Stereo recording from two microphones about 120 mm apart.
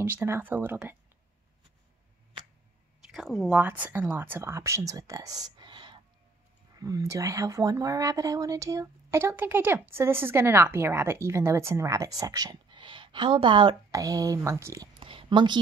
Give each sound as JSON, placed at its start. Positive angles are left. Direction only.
{"t": 0.0, "sound": "speech", "side_deg": -20}
{"t": 3.1, "sound": "speech", "side_deg": -5}
{"t": 6.8, "sound": "speech", "side_deg": -25}
{"t": 13.9, "sound": "speech", "side_deg": -30}
{"t": 15.0, "sound": "a sound", "side_deg": -45}